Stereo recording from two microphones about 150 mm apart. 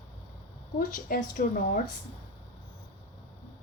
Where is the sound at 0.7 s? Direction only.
70° left (ahead or behind).